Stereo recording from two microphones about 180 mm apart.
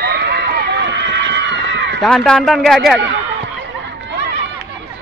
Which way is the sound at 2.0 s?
Centre (ahead or behind).